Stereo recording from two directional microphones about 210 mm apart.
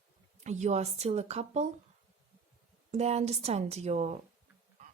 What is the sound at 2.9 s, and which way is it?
Speech, 30° right (ahead or behind).